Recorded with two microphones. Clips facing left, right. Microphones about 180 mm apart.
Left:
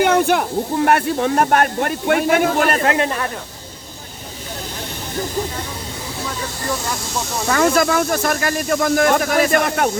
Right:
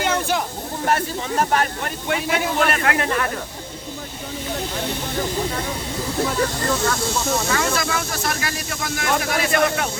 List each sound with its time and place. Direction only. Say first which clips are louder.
0.0 s a sound: left 7 dB; 60° left (ahead or behind)
0.9 s speech: left 3 dB; 60° left (ahead or behind); by 2.8 s 45° left (ahead or behind)
2.8 s speech: left 3 dB; 25° left (ahead or behind)
7.5 s speech: left 7 dB; 50° left (ahead or behind)